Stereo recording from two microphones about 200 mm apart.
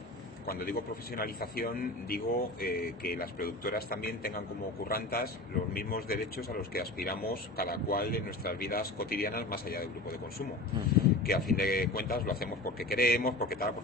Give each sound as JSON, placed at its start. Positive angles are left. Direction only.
{"t": 0.5, "sound": "a man's voice", "side_deg": 50}
{"t": 11.0, "sound": "a man's voice", "side_deg": 50}